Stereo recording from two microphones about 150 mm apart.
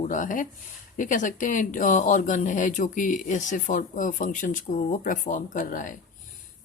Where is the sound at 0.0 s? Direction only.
60° left (ahead or behind).